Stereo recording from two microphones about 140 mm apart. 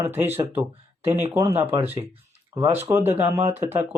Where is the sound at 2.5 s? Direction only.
40° right (ahead or behind).